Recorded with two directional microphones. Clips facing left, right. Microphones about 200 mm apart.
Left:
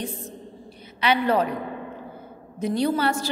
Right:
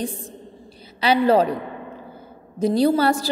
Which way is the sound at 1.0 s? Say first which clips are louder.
Right 5 dB; 30° right (ahead or behind).